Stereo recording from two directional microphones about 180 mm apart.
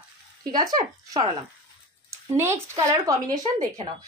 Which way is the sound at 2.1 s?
15° right (ahead or behind).